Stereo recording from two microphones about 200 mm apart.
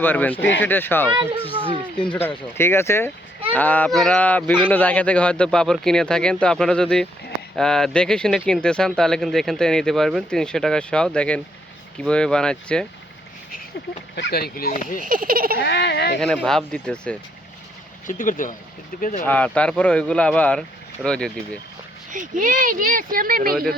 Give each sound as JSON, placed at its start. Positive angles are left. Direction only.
{"t": 0.0, "sound": "speech", "side_deg": 10}
{"t": 2.6, "sound": "speech", "side_deg": 10}
{"t": 14.2, "sound": "speech", "side_deg": 55}
{"t": 15.0, "sound": "speech", "side_deg": -45}
{"t": 15.5, "sound": "speech", "side_deg": 60}
{"t": 16.2, "sound": "speech", "side_deg": 5}
{"t": 18.0, "sound": "speech", "side_deg": 40}
{"t": 19.2, "sound": "speech", "side_deg": 10}
{"t": 22.1, "sound": "speech", "side_deg": -40}